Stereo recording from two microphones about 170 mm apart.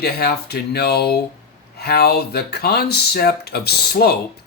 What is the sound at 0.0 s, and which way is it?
Speech, 65° left (ahead or behind).